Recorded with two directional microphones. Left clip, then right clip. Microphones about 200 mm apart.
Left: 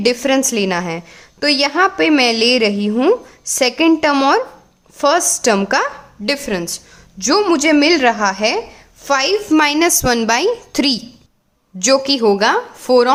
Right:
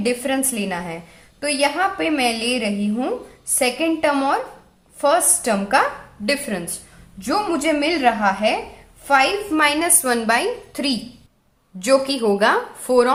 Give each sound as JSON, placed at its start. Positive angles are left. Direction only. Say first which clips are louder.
{"t": 0.0, "sound": "a woman's voice", "louder": "left 7 dB", "side_deg": 50}
{"t": 11.8, "sound": "a woman's voice", "louder": "left 4 dB", "side_deg": 30}